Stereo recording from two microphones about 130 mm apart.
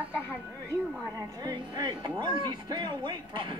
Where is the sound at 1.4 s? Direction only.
35° right (ahead or behind).